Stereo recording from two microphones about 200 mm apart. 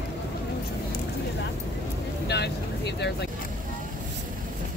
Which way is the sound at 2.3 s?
55° left (ahead or behind).